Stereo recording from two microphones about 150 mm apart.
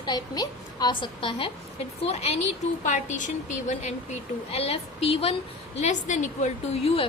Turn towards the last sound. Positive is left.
turn(degrees=40)  # may be behind; listen again after turning